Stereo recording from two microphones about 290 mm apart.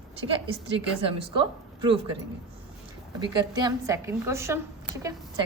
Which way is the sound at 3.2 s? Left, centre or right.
Centre.